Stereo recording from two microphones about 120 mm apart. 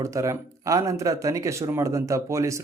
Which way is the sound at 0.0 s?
25° right (ahead or behind).